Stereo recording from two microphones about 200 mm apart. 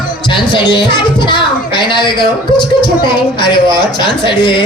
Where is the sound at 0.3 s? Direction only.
20° left (ahead or behind).